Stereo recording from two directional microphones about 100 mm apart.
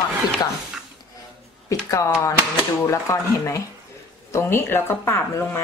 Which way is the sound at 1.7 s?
30° left (ahead or behind).